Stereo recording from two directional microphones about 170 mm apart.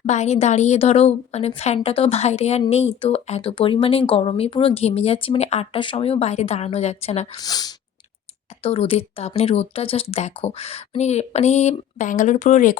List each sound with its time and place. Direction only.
0.0 s a woman's voice: 40° left (ahead or behind)
7.3 s speech: 25° left (ahead or behind)
8.6 s a woman's voice: 35° left (ahead or behind)